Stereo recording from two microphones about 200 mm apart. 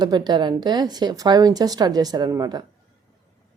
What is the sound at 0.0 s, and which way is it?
Speech, 20° right (ahead or behind).